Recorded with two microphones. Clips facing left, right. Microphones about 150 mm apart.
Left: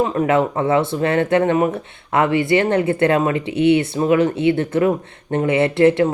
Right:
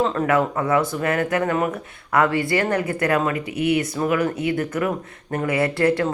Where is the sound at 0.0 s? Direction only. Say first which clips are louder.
Left 3 dB; 15° left (ahead or behind).